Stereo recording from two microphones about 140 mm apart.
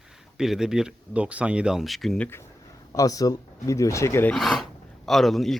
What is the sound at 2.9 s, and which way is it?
Speech, 25° left (ahead or behind).